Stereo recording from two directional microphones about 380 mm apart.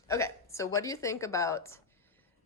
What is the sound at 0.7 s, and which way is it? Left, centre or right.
Speech, centre.